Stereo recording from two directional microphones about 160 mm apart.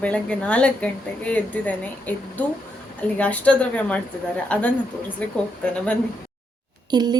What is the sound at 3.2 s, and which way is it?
Speech, 10° left (ahead or behind).